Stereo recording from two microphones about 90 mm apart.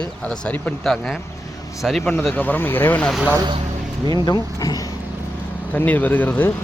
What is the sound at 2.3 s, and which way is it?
Speech, 20° left (ahead or behind).